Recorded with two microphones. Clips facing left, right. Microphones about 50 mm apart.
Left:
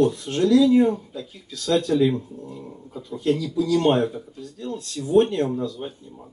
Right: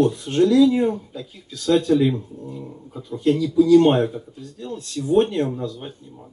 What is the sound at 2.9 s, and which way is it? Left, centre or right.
Speech, centre.